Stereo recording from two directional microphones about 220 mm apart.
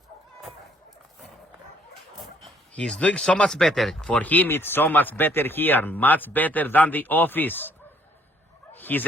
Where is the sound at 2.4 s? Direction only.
5° left (ahead or behind).